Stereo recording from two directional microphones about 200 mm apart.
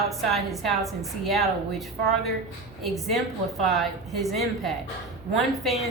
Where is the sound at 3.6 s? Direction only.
Centre (ahead or behind).